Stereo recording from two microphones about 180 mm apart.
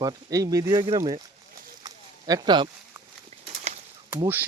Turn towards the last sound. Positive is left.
turn(degrees=-10)  # may be behind; listen again after turning